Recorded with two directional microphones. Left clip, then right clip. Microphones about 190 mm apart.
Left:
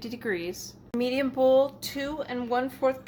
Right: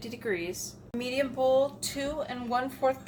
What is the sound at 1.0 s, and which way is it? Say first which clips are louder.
A woman's voice: left 4 dB; 50° left (ahead or behind).